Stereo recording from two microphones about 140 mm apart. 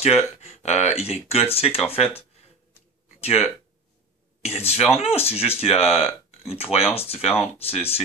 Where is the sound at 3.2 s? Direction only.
45° left (ahead or behind).